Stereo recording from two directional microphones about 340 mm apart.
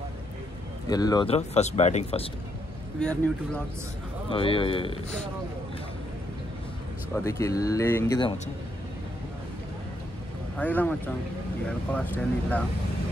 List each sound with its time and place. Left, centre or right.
0.8 s speech: centre
3.0 s speech: centre
4.3 s speech: centre
7.2 s speech: centre
10.6 s speech: centre